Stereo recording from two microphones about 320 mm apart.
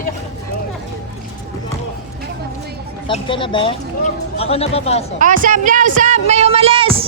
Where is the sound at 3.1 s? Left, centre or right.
Centre.